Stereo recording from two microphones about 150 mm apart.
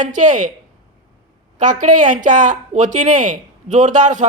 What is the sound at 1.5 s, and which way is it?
Speech, 60° right (ahead or behind).